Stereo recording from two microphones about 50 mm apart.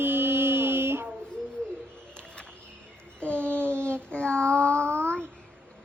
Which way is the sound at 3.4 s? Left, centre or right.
Right.